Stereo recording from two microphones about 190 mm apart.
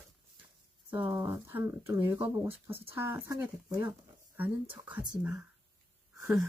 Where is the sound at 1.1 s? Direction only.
15° right (ahead or behind).